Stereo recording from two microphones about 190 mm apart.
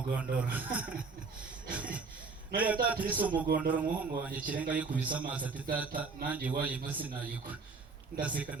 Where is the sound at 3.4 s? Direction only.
60° right (ahead or behind).